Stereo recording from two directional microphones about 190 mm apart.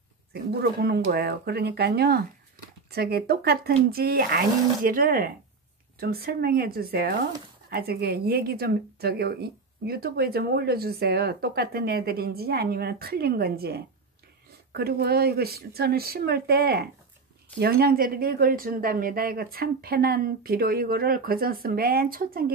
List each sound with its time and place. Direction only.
0.3 s a woman's voice: 55° right (ahead or behind)